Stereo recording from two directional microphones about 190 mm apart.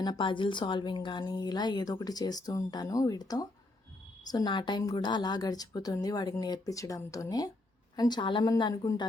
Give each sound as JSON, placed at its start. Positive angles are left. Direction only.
{"t": 0.0, "sound": "a woman's voice", "side_deg": 25}